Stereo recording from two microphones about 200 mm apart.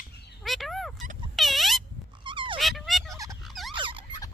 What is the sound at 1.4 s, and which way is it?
Squeak, centre (ahead or behind).